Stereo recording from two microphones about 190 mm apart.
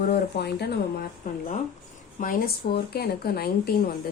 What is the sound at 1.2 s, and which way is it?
A woman's voice, 45° left (ahead or behind).